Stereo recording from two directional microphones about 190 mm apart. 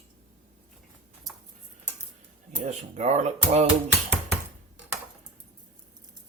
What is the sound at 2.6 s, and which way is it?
Dishes, 40° right (ahead or behind).